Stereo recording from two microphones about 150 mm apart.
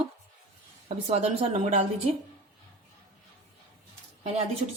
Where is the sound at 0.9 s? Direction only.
45° right (ahead or behind).